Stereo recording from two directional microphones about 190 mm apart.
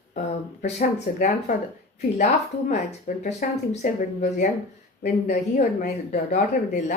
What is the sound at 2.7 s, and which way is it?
Speech, 40° left (ahead or behind).